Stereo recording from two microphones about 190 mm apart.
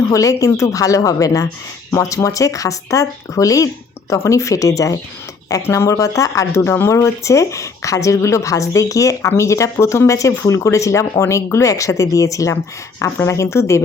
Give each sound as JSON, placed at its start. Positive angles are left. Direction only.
{"t": 0.0, "sound": "speech", "side_deg": 15}